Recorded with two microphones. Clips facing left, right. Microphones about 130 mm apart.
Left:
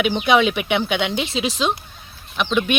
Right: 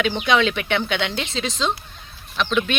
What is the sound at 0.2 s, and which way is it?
Speech, 10° left (ahead or behind).